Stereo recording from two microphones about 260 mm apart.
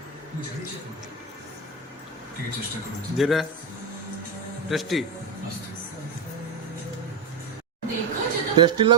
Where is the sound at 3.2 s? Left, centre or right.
Centre.